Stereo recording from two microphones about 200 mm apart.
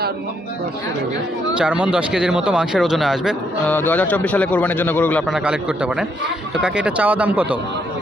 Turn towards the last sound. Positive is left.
turn(degrees=-10)  # may be behind; listen again after turning